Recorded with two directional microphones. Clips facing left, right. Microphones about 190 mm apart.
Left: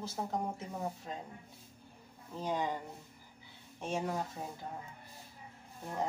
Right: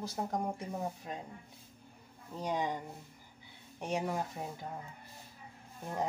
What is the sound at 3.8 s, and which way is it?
Speech, 15° right (ahead or behind).